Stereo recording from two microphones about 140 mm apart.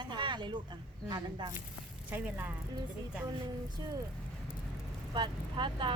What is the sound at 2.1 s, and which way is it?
Speech, 15° right (ahead or behind).